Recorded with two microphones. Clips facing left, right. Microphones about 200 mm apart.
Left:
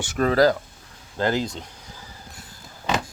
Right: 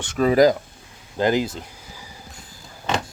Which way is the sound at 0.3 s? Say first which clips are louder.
Right 3 dB; 15° right (ahead or behind).